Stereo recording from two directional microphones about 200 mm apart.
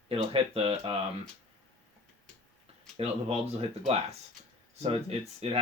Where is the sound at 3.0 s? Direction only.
30° right (ahead or behind).